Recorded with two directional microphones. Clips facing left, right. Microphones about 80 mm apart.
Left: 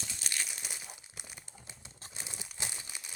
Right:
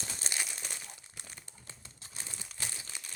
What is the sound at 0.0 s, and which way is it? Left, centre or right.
Crumpling, right.